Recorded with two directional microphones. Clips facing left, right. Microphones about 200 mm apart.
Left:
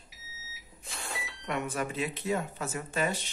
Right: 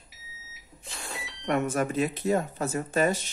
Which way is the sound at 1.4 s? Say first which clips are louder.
Right 7 dB; 45° right (ahead or behind).